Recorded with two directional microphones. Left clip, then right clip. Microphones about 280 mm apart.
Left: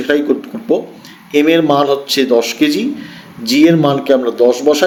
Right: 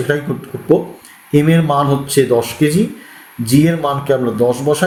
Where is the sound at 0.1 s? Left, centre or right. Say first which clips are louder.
Left 9 dB; left.